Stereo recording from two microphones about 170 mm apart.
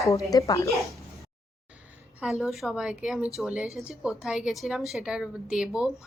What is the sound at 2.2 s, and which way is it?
Speech, centre (ahead or behind).